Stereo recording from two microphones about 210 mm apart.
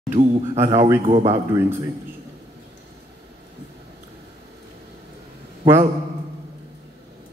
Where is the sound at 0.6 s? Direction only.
15° right (ahead or behind).